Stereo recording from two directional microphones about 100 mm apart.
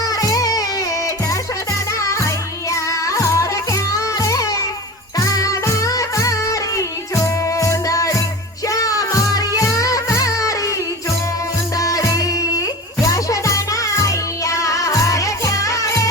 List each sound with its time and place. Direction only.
0.0 s music: 40° left (ahead or behind)
2.0 s music: 30° left (ahead or behind)
11.8 s music: 35° left (ahead or behind)